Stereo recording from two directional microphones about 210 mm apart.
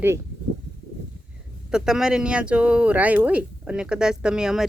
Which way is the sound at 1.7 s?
5° right (ahead or behind).